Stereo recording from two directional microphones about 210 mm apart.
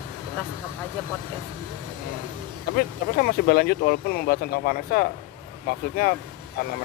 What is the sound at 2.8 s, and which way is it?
Speech, 45° left (ahead or behind).